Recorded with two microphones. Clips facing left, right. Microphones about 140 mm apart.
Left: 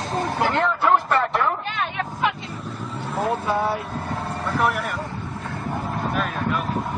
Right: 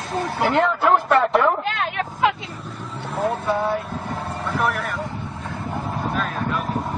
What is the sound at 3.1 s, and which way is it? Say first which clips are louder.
Speech: right 1 dB; centre (ahead or behind).